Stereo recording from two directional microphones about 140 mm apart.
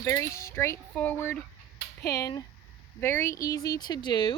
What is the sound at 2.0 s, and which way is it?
Speech, 25° left (ahead or behind).